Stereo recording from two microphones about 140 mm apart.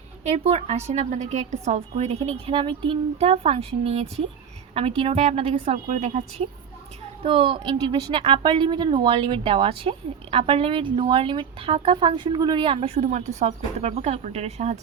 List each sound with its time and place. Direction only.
0.3 s a woman's voice: 45° right (ahead or behind)
2.5 s a woman's voice: 40° right (ahead or behind)